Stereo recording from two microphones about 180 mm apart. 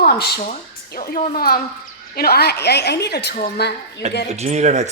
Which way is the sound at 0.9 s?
50° left (ahead or behind).